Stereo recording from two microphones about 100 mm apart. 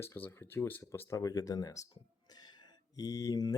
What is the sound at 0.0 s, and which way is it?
Speech, 25° left (ahead or behind).